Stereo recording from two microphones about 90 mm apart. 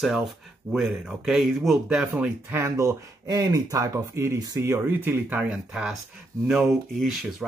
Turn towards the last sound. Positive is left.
turn(degrees=0)  # may be behind; listen again after turning